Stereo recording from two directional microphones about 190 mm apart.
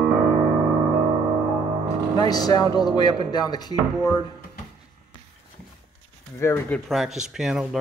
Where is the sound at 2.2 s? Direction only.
20° left (ahead or behind).